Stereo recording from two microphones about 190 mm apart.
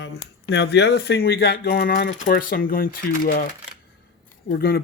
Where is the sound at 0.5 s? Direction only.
60° left (ahead or behind).